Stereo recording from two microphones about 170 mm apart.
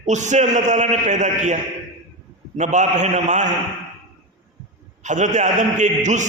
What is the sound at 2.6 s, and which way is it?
Speech, 45° right (ahead or behind).